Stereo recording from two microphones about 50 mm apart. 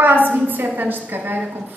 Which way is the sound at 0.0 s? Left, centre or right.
Right.